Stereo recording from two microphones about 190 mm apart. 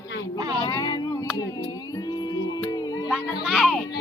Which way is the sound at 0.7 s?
20° left (ahead or behind).